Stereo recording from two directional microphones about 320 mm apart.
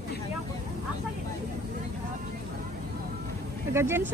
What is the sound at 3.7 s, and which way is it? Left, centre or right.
Vehicle, centre.